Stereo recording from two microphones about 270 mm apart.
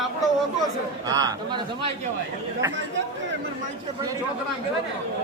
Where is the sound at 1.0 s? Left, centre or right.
Centre.